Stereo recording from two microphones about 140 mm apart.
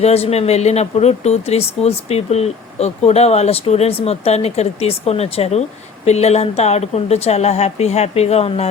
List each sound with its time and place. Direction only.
0.0 s speech: 45° left (ahead or behind)